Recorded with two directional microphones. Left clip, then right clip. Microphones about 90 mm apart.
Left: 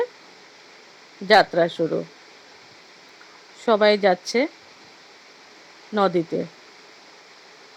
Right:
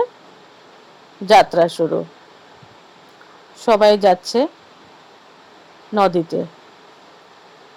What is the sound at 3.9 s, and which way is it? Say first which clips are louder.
Speech: right 5 dB; 30° right (ahead or behind).